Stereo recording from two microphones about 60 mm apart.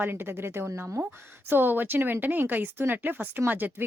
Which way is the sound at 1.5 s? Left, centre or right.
Right.